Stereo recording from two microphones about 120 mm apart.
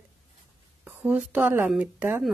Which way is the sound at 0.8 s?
10° right (ahead or behind).